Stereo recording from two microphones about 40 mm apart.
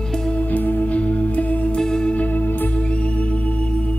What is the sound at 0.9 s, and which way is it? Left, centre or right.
Music, left.